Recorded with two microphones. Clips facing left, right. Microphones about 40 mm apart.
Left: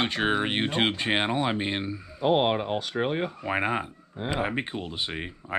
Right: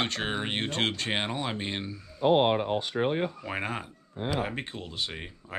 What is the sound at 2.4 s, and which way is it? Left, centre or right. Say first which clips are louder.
Speech: even; left.